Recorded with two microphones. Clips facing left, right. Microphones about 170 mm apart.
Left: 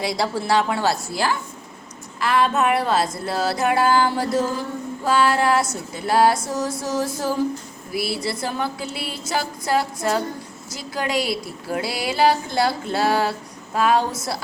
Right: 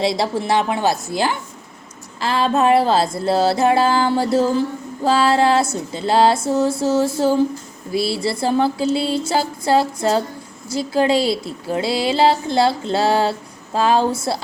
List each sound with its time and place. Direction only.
0.0 s a woman's voice: 25° right (ahead or behind)